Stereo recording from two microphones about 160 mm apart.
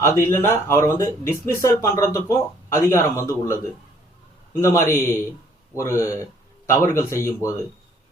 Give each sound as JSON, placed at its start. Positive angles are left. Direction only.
{"t": 0.0, "sound": "speech", "side_deg": 15}
{"t": 4.6, "sound": "speech", "side_deg": 15}